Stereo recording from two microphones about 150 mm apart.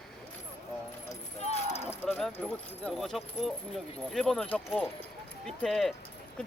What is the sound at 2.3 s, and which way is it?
Speech, 10° left (ahead or behind).